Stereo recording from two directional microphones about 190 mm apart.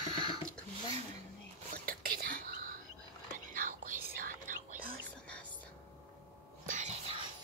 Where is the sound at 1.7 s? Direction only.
50° right (ahead or behind).